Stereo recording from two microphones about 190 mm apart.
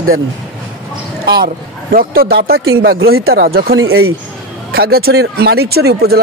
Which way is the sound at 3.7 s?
90° right.